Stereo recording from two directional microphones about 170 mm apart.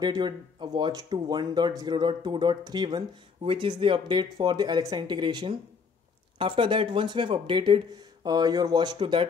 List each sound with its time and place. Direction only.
0.0 s speech: 25° right (ahead or behind)